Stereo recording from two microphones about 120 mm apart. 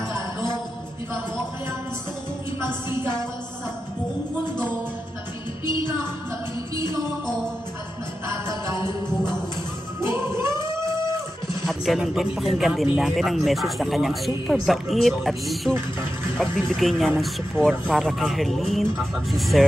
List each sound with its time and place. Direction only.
2.6 s a woman's voice: 20° right (ahead or behind)
9.9 s music: 20° right (ahead or behind)
11.6 s speech: centre (ahead or behind)